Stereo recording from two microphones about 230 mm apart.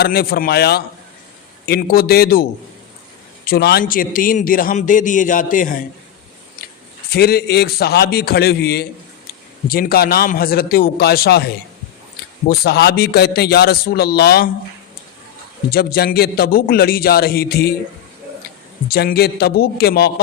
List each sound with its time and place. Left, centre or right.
0.0 s a man's voice: left
6.6 s a sound: left
7.1 s a man's voice: left
15.7 s a man's voice: left
18.9 s a man's voice: left